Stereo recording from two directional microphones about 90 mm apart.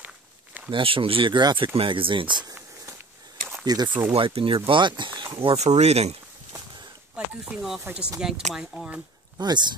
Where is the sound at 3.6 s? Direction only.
45° right (ahead or behind).